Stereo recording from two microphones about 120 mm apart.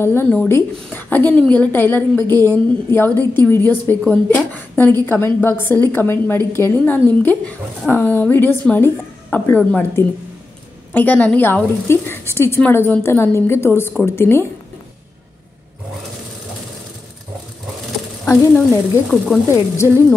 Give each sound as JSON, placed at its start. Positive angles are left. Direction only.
{"t": 0.0, "sound": "a woman's voice", "side_deg": 20}
{"t": 18.5, "sound": "speech", "side_deg": 0}